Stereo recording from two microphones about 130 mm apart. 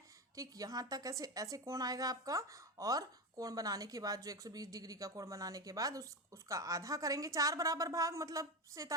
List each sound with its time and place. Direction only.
0.3 s a woman's voice: 30° right (ahead or behind)